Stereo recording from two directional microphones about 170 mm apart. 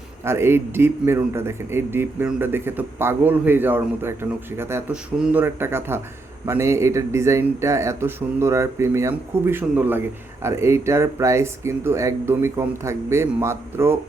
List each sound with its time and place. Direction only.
0.3 s a man's voice: 15° right (ahead or behind)